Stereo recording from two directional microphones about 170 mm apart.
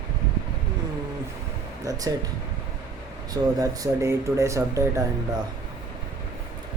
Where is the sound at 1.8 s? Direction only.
20° right (ahead or behind).